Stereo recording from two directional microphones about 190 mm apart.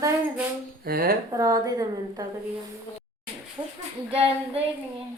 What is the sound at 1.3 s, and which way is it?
Speech, 20° right (ahead or behind).